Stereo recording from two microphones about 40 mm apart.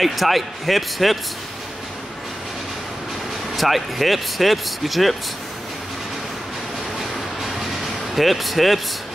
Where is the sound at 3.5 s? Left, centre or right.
Centre.